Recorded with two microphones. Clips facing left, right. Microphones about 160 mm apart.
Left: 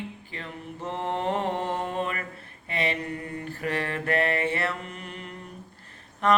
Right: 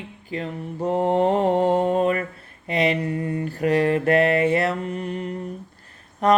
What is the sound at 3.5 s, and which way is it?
Mantra, 35° right (ahead or behind).